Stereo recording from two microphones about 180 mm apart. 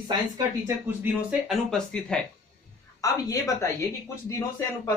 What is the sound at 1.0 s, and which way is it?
Speech, 10° right (ahead or behind).